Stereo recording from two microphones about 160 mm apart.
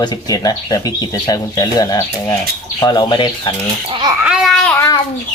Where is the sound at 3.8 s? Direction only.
30° right (ahead or behind).